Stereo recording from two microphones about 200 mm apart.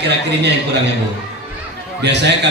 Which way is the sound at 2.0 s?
60° right (ahead or behind).